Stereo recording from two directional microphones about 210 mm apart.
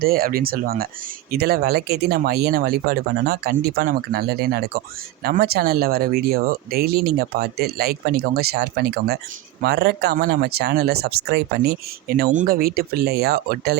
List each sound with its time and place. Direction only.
0.0 s speech: 45° right (ahead or behind)